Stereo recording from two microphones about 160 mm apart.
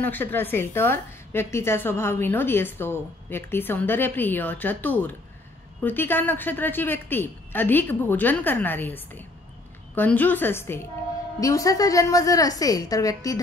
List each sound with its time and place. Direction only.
0.0 s a woman's voice: 10° left (ahead or behind)